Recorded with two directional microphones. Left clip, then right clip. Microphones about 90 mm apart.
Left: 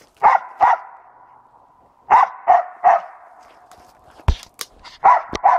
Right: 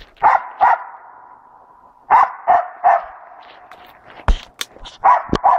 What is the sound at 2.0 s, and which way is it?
Dog, 40° left (ahead or behind).